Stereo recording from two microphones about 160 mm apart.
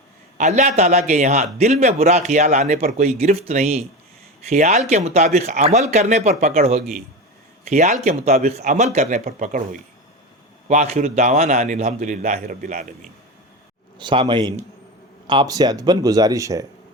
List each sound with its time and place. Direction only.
0.3 s a man's voice: 45° right (ahead or behind)
7.7 s a man's voice: 45° right (ahead or behind)
10.7 s a man's voice: 45° right (ahead or behind)
14.0 s speech: 30° right (ahead or behind)